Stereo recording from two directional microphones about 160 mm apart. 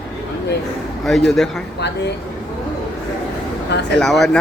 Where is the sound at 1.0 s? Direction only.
Centre (ahead or behind).